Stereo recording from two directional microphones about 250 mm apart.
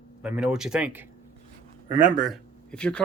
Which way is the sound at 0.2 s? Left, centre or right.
Centre.